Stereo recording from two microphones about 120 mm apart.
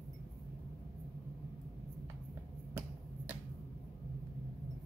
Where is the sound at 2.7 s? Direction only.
15° right (ahead or behind).